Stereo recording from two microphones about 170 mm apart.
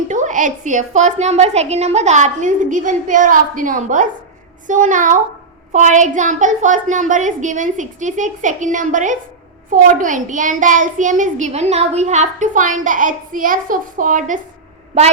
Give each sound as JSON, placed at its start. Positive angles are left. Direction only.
{"t": 0.1, "sound": "child singing", "side_deg": -45}